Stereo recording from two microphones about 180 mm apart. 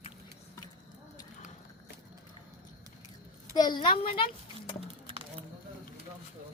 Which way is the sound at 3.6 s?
25° left (ahead or behind).